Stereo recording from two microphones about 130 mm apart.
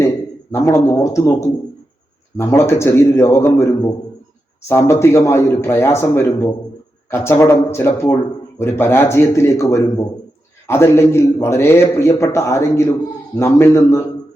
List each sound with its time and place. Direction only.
0.0 s a man's voice: 20° left (ahead or behind)